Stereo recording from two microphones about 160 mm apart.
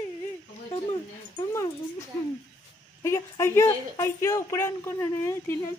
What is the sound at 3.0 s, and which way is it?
Speech, 15° left (ahead or behind).